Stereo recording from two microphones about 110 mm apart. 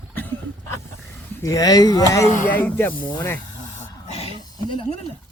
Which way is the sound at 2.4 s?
15° left (ahead or behind).